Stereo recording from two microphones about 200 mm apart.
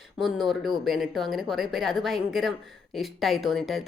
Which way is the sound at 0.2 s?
Centre (ahead or behind).